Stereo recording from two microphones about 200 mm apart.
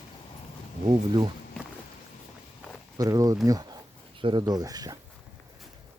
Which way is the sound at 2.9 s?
15° right (ahead or behind).